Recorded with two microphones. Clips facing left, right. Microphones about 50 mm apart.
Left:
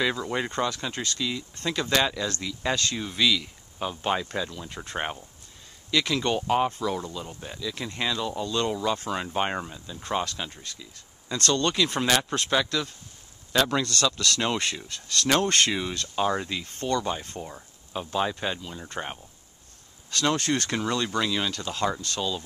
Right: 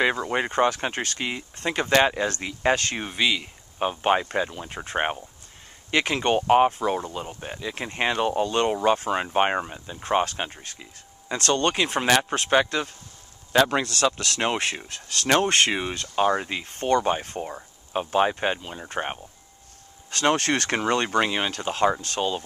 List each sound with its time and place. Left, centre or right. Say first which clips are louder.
0.0 s speech: right 4 dB; right
11.3 s speech: right 2 dB; right
11.6 s a man's voice: right 2 dB; right
20.3 s speech: right 3 dB; right
21.8 s speech: right 5 dB; right